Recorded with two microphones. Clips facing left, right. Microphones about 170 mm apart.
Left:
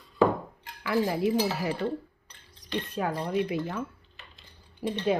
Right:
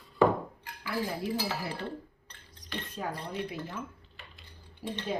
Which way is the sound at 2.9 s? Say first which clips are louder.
Left 8 dB; 85° left.